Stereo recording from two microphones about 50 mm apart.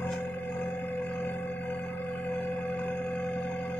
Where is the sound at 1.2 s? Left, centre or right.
Left.